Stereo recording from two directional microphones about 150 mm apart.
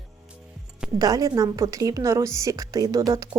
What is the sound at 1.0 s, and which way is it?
A woman's voice, 25° right (ahead or behind).